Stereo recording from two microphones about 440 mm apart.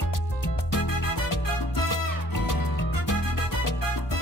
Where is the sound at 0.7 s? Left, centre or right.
Left.